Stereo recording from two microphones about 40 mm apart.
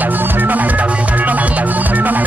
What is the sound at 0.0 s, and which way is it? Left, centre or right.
Music, right.